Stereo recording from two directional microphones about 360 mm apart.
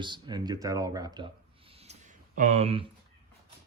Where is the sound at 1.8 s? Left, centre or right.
Centre.